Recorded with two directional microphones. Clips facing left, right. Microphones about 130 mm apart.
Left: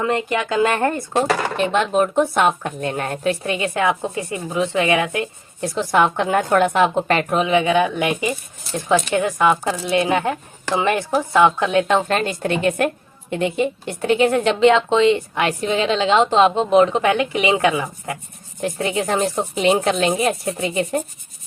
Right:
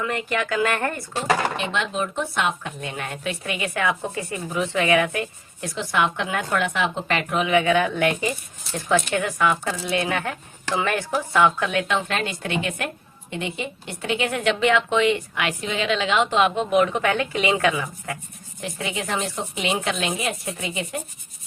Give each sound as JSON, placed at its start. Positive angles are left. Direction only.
{"t": 0.0, "sound": "speech", "side_deg": 25}
{"t": 1.1, "sound": "speech", "side_deg": 45}
{"t": 5.7, "sound": "speech", "side_deg": 40}
{"t": 7.4, "sound": "speech", "side_deg": 20}
{"t": 11.9, "sound": "speech", "side_deg": 40}
{"t": 18.6, "sound": "speech", "side_deg": 45}